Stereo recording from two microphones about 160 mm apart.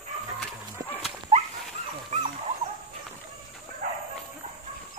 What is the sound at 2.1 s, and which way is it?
Dog, 45° right (ahead or behind).